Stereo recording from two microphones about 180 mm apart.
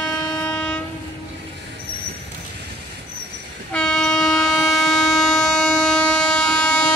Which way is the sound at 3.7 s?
5° left (ahead or behind).